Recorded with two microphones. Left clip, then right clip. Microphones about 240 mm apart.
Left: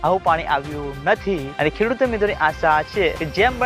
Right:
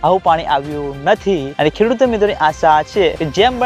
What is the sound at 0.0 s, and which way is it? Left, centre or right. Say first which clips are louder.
Speech: right 5 dB; right.